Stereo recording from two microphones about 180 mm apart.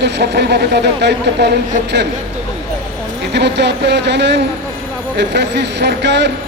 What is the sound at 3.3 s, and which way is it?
Speech, 70° right (ahead or behind).